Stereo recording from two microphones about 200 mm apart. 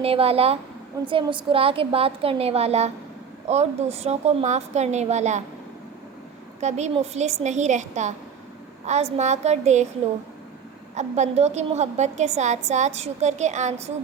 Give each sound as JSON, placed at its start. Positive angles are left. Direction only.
{"t": 0.0, "sound": "a woman's voice", "side_deg": -30}
{"t": 6.6, "sound": "a woman's voice", "side_deg": -35}
{"t": 10.9, "sound": "a woman's voice", "side_deg": -35}